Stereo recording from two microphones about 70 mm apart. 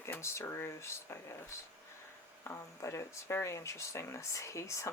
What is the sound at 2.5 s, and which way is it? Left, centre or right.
Speech, left.